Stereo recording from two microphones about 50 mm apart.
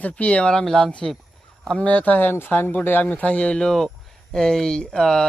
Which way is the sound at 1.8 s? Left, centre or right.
Left.